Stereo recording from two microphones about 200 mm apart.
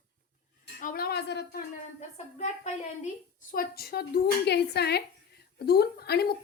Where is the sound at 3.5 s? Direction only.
50° left (ahead or behind).